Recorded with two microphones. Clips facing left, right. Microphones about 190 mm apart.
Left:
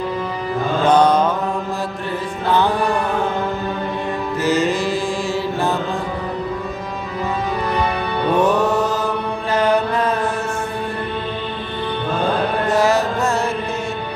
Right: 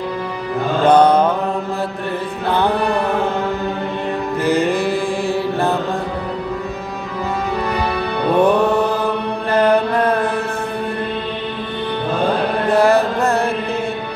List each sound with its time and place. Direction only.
0.8 s mantra: 60° right (ahead or behind)
2.5 s music: 60° right (ahead or behind)
4.4 s music: 60° right (ahead or behind)
8.5 s mantra: 60° right (ahead or behind)
12.6 s music: 60° right (ahead or behind)